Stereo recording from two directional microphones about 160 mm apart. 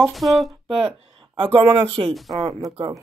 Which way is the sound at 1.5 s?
30° right (ahead or behind).